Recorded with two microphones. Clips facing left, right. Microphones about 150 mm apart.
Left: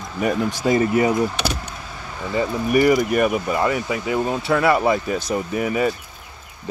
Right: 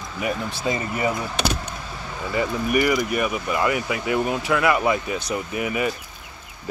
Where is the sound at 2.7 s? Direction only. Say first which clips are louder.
Left 5 dB; 35° left (ahead or behind).